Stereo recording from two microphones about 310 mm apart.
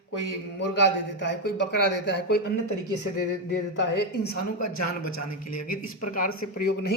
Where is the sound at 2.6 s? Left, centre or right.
Left.